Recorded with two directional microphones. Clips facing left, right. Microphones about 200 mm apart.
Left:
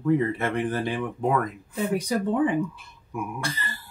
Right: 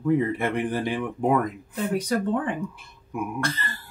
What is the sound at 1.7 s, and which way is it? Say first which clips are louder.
Speech: left 1 dB; 10° left (ahead or behind).